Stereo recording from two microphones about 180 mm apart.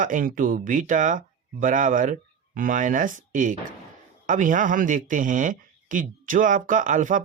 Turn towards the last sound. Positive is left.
turn(degrees=-45)  # may be behind; listen again after turning